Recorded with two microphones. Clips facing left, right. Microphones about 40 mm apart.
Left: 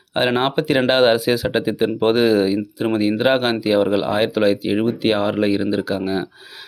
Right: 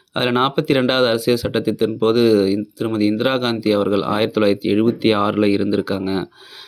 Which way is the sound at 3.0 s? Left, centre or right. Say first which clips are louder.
Even; centre.